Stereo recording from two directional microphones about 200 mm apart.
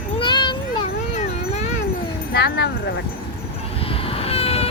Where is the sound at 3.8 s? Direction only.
30° left (ahead or behind).